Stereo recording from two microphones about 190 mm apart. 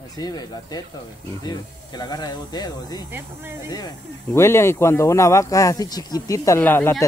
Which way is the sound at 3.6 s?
20° left (ahead or behind).